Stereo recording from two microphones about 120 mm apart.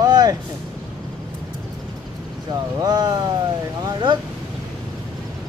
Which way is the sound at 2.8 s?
35° right (ahead or behind).